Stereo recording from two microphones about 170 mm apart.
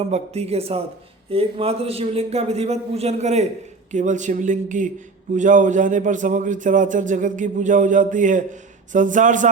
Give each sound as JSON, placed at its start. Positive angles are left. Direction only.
{"t": 0.1, "sound": "a man's voice", "side_deg": -40}